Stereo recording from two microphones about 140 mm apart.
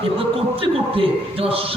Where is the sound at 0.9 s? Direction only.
40° right (ahead or behind).